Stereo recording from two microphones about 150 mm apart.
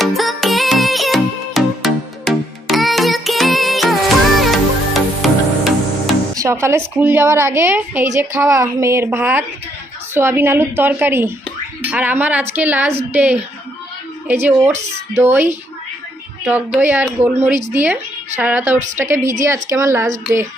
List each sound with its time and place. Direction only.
0.0 s music: centre (ahead or behind)
6.3 s a woman's voice: 20° right (ahead or behind)
16.4 s a woman's voice: 10° right (ahead or behind)